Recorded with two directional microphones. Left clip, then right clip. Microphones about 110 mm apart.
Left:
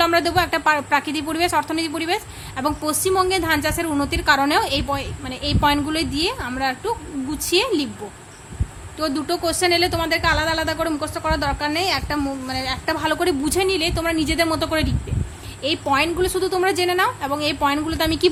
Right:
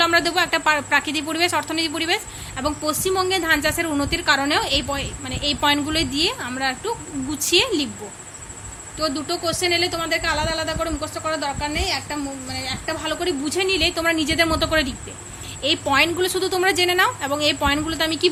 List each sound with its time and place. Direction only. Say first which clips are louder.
0.0 s a woman's voice: even; 15° left (ahead or behind)
9.0 s a woman's voice: left 1 dB; 30° left (ahead or behind)
13.6 s a woman's voice: right 4 dB; 15° left (ahead or behind)